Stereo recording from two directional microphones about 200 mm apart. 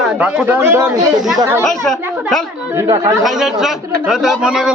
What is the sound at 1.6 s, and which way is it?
Speech, 5° left (ahead or behind).